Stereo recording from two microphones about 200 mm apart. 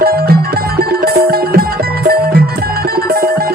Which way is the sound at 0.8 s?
50° right (ahead or behind).